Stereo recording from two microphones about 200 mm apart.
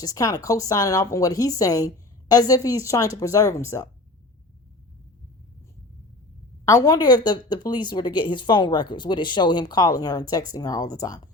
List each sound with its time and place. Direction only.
0.0 s a woman's voice: 15° left (ahead or behind)
6.7 s speech: 20° left (ahead or behind)